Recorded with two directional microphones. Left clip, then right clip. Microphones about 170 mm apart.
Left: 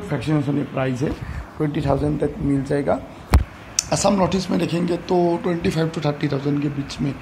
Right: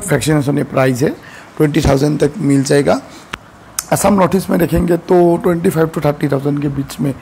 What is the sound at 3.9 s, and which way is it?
Speech, 60° right (ahead or behind).